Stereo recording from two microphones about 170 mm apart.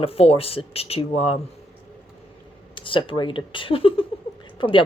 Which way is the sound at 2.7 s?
30° left (ahead or behind).